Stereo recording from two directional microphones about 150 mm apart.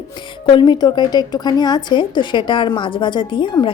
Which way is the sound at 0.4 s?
30° left (ahead or behind).